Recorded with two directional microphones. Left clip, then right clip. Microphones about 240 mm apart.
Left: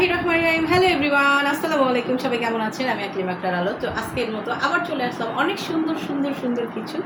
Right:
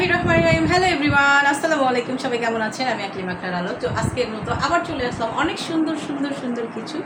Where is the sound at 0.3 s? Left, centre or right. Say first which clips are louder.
Right 2 dB; centre.